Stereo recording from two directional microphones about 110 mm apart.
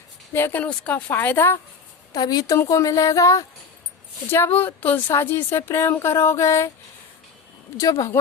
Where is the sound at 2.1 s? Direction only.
35° left (ahead or behind).